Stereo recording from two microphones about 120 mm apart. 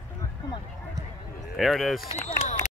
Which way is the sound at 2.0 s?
60° left (ahead or behind).